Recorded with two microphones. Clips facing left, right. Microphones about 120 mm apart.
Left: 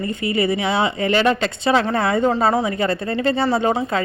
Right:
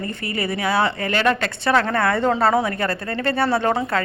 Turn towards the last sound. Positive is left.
turn(degrees=20)  # may be behind; listen again after turning